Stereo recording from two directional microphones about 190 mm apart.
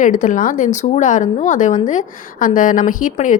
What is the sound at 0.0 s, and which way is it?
A woman's voice, 40° left (ahead or behind).